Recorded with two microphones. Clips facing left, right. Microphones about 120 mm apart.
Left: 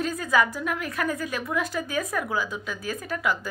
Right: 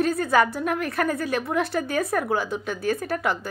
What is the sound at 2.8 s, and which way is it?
Speech, 35° right (ahead or behind).